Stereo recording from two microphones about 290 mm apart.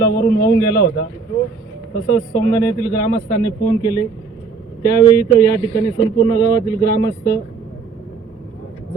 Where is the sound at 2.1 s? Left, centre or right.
Left.